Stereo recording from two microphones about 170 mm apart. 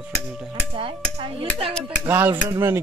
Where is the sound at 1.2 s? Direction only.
30° right (ahead or behind).